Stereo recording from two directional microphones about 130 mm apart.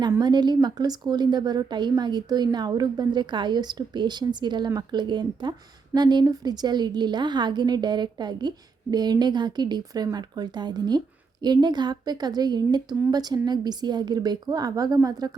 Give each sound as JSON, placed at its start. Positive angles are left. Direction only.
{"t": 0.2, "sound": "speech", "side_deg": -35}